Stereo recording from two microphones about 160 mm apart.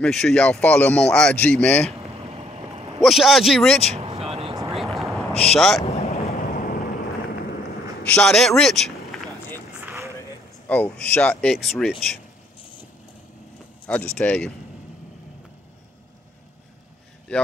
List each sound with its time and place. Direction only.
0.0 s speech: 5° left (ahead or behind)
2.2 s vehicle: 40° right (ahead or behind)
3.0 s speech: centre (ahead or behind)
3.9 s vehicle: 40° right (ahead or behind)
4.7 s vehicle: centre (ahead or behind)
5.3 s speech: 40° left (ahead or behind)
5.9 s boat: 40° left (ahead or behind)
6.5 s vehicle: 65° left (ahead or behind)
8.1 s speech: 5° left (ahead or behind)
9.8 s run: 15° right (ahead or behind)
10.7 s speech: 10° left (ahead or behind)
14.1 s speech: 5° left (ahead or behind)
17.3 s speech: 5° left (ahead or behind)